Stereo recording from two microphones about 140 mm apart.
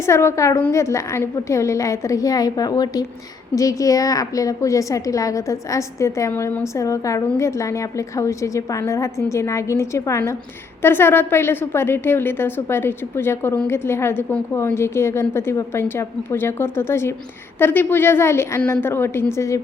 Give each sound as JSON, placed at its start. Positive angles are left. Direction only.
{"t": 0.0, "sound": "a woman's voice", "side_deg": 20}